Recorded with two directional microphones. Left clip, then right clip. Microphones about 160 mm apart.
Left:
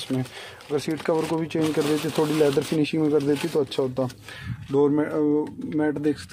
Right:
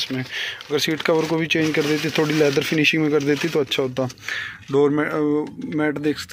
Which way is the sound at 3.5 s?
20° right (ahead or behind).